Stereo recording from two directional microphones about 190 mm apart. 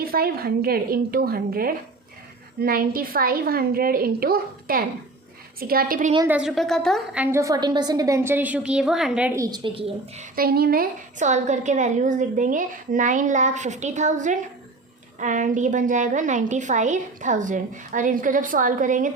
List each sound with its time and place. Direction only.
0.0 s a woman's voice: 50° right (ahead or behind)
6.2 s a woman's voice: 5° right (ahead or behind); by 10.2 s 30° right (ahead or behind)
10.3 s a woman's voice: 50° right (ahead or behind)